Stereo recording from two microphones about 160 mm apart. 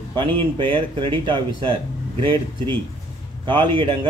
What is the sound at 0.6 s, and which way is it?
A man's voice, 30° right (ahead or behind).